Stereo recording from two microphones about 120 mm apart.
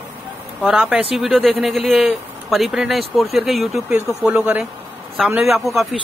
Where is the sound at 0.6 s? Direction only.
5° right (ahead or behind).